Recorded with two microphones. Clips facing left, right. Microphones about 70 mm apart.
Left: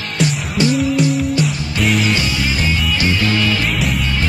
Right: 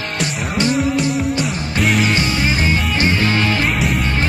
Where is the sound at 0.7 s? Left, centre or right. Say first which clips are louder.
Left 2 dB; centre.